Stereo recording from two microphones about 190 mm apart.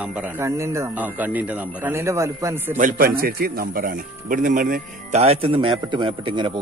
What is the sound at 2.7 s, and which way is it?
Speech, 45° right (ahead or behind).